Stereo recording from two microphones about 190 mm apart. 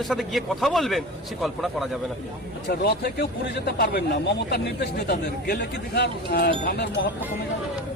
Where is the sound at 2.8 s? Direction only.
55° left (ahead or behind).